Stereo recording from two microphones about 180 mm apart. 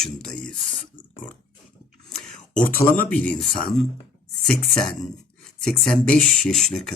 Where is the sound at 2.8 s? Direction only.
10° left (ahead or behind).